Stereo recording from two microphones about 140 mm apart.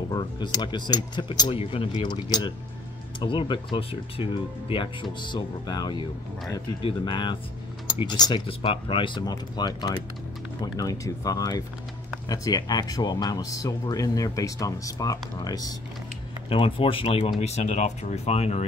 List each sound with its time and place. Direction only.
0.1 s speech: 30° left (ahead or behind)
1.6 s speech: 40° left (ahead or behind)
16.4 s speech: 40° left (ahead or behind)
17.4 s speech: 50° left (ahead or behind)